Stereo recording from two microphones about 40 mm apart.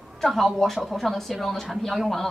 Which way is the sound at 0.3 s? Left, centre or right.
Centre.